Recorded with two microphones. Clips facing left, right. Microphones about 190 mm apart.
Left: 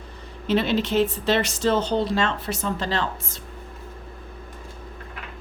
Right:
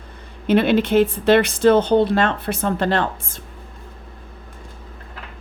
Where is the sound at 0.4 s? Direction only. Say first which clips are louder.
Right 6 dB; 55° right (ahead or behind).